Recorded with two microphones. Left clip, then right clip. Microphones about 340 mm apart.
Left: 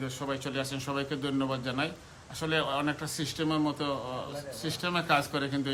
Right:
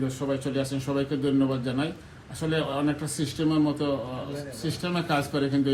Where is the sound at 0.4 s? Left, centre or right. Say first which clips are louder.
Right 5 dB; centre.